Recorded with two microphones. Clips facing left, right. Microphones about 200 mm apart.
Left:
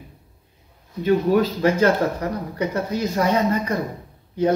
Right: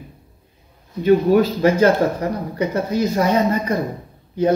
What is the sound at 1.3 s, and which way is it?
Speech, 10° right (ahead or behind).